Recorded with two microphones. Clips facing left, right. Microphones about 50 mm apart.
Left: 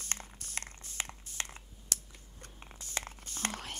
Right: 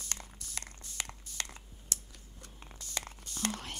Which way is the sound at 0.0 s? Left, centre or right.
Left.